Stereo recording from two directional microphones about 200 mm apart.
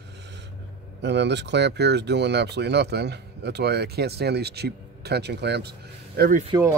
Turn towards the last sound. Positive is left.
turn(degrees=-15)  # may be behind; listen again after turning